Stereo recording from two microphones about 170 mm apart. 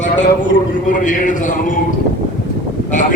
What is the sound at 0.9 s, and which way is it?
Speech, 50° left (ahead or behind).